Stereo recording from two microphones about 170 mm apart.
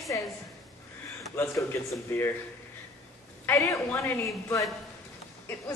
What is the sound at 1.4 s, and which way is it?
Speech, 15° left (ahead or behind).